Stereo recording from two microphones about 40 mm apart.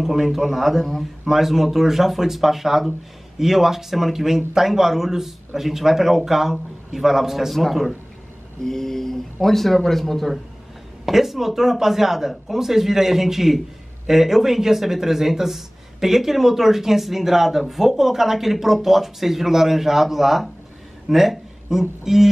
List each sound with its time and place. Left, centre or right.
0.0 s speech: centre
1.3 s speech: centre
8.6 s speech: centre
11.1 s speech: centre